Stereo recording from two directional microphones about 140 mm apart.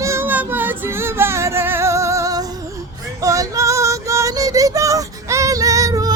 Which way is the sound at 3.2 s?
25° right (ahead or behind).